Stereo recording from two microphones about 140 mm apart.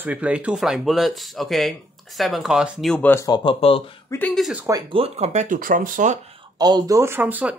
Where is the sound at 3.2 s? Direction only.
30° left (ahead or behind).